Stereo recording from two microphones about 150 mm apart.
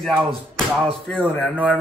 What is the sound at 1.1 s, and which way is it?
Speech, 10° left (ahead or behind).